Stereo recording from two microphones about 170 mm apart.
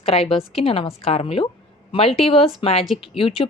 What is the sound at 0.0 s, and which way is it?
A woman's voice, 35° left (ahead or behind).